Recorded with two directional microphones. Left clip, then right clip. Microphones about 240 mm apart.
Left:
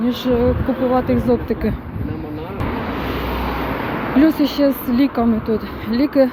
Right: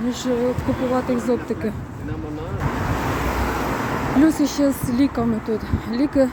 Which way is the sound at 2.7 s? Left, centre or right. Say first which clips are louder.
Right 1 dB; right.